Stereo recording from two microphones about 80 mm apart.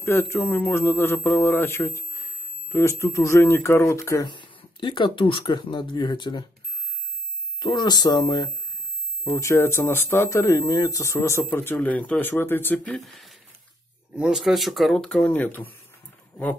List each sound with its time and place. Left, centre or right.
0.0 s speech: left
4.3 s speech: left
7.6 s speech: left
9.3 s speech: left; by 13.0 s centre
13.0 s speech: centre
15.0 s speech: centre